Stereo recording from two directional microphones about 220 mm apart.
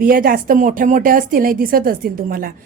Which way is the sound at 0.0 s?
40° right (ahead or behind).